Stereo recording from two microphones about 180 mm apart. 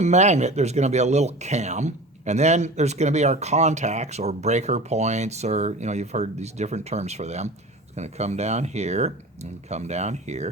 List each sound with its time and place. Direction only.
0.0 s speech: 40° right (ahead or behind)